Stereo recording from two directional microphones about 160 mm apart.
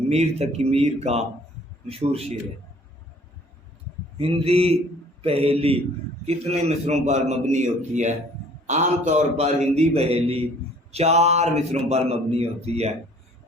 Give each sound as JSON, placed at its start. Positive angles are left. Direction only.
{"t": 0.1, "sound": "speech", "side_deg": -40}
{"t": 4.2, "sound": "a man's voice", "side_deg": -35}